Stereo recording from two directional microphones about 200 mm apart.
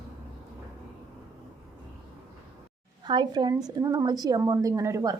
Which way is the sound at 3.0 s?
20° right (ahead or behind).